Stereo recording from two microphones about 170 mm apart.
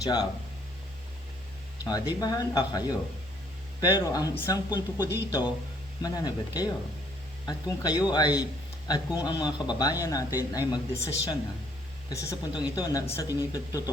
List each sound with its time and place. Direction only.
0.0 s speech: 25° left (ahead or behind)
1.8 s speech: 20° left (ahead or behind)